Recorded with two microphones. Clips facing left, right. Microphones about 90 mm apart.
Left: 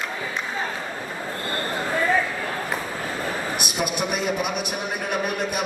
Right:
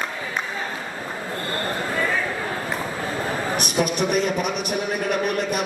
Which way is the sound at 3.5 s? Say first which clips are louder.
Right 4 dB; 5° left (ahead or behind).